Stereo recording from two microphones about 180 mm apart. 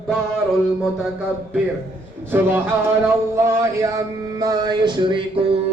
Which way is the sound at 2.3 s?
10° right (ahead or behind).